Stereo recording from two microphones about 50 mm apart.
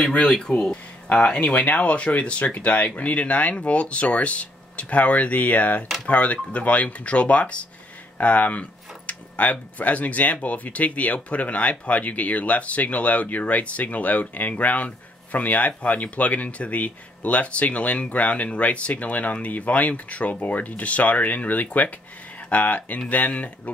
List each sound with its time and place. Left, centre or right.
0.3 s speech: centre